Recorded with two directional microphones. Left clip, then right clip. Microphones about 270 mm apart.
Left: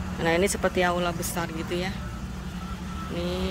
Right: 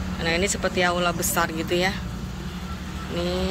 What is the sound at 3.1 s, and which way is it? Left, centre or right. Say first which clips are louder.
Vehicle: right 4 dB; centre.